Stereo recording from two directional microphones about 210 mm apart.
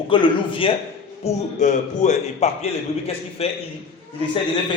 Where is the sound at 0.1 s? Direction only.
20° left (ahead or behind).